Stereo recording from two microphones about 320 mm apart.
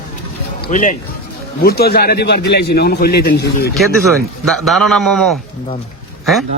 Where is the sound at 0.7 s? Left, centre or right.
Left.